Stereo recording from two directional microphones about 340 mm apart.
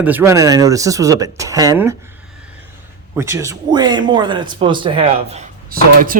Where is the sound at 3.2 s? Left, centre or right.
Centre.